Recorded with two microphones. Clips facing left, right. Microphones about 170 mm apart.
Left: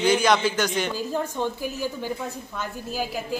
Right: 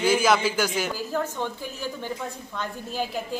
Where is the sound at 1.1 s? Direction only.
15° left (ahead or behind).